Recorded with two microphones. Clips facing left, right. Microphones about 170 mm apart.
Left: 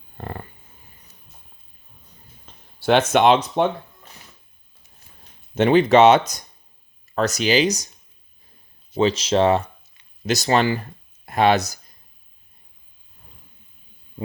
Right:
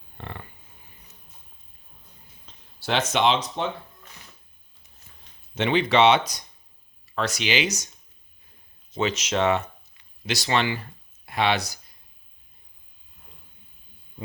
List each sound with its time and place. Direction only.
0.2 s dog: 40° left (ahead or behind)
2.5 s speech: 55° left (ahead or behind)
5.5 s speech: 45° left (ahead or behind)
9.0 s speech: 30° left (ahead or behind)